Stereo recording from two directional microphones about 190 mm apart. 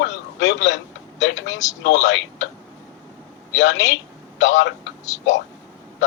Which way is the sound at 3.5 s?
75° left (ahead or behind).